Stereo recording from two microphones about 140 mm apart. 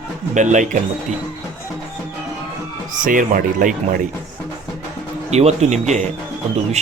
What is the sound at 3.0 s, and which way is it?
Speech, 75° right (ahead or behind).